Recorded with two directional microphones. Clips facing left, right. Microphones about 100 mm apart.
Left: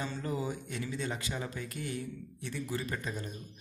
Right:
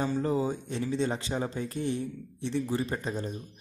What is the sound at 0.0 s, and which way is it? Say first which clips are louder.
Speech: right 8 dB; 30° right (ahead or behind).